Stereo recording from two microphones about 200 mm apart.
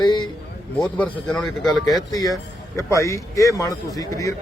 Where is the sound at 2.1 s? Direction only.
20° left (ahead or behind).